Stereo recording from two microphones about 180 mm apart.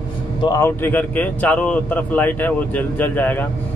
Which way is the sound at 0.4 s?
15° left (ahead or behind).